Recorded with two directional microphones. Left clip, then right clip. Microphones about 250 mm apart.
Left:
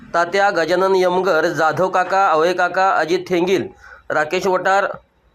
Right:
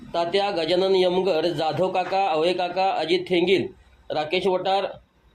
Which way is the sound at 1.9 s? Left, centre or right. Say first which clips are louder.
Left 9 dB; left.